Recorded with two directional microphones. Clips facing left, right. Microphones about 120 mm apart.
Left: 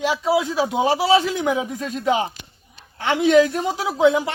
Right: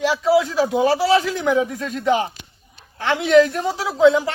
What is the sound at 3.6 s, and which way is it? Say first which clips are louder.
Speech: right 2 dB; 20° left (ahead or behind).